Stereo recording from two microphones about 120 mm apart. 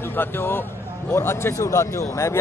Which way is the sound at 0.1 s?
20° left (ahead or behind).